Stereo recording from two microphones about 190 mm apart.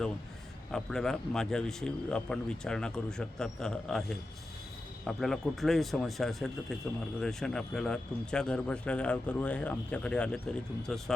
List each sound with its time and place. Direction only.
0.7 s speech: 5° left (ahead or behind)